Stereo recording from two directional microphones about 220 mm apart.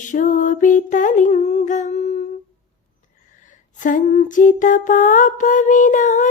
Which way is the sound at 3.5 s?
35° left (ahead or behind).